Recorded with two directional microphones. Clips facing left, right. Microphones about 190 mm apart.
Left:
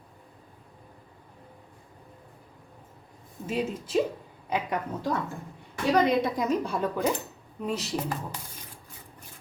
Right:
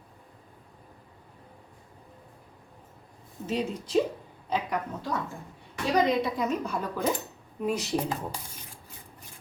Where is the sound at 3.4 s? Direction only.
5° left (ahead or behind).